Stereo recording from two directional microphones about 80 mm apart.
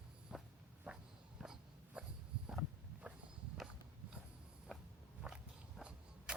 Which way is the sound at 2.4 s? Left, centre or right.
Centre.